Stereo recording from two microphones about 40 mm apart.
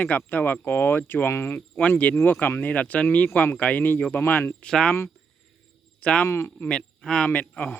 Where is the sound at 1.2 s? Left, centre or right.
Left.